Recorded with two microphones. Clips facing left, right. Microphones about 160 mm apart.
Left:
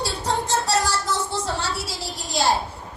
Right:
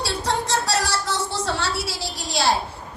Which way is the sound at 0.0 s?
75° right (ahead or behind).